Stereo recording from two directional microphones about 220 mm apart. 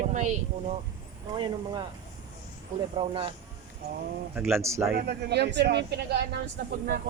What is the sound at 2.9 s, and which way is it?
Speech, 25° right (ahead or behind).